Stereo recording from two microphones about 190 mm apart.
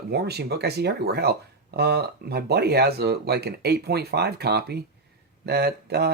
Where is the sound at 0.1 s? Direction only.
60° right (ahead or behind).